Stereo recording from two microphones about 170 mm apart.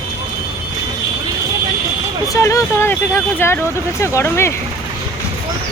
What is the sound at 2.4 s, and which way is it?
Speech, 15° left (ahead or behind).